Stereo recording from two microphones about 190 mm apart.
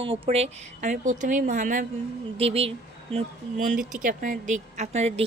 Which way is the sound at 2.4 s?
30° right (ahead or behind).